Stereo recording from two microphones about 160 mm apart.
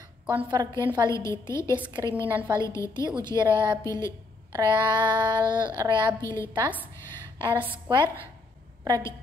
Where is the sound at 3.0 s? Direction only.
25° right (ahead or behind).